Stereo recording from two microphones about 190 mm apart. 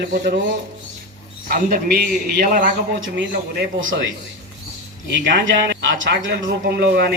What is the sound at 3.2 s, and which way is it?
Speech, 80° right.